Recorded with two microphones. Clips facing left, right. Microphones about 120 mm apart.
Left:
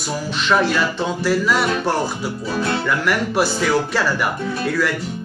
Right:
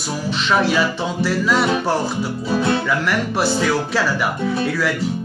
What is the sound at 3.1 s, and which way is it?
Music, centre (ahead or behind).